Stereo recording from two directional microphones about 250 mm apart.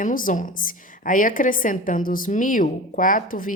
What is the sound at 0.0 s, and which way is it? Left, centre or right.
A woman's voice, left.